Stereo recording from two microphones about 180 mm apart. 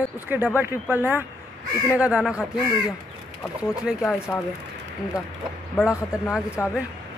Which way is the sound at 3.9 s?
Centre (ahead or behind).